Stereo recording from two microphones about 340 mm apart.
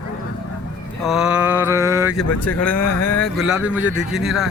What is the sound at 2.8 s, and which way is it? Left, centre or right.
Speech, left.